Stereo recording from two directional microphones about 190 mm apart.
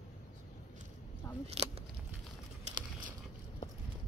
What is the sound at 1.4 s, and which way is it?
Speech, 30° right (ahead or behind).